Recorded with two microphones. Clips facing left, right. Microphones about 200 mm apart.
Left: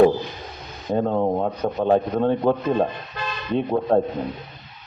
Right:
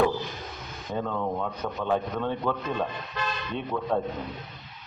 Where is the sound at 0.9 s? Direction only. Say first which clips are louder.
Left 9 dB; 40° left (ahead or behind).